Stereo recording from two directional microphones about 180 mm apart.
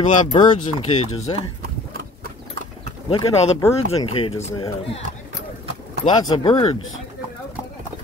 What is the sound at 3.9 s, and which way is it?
Speech, 35° left (ahead or behind).